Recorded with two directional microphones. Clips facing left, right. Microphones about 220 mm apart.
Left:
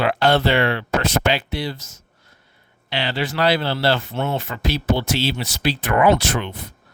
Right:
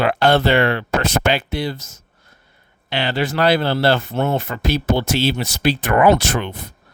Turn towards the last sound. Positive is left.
turn(degrees=-45)  # may be behind; listen again after turning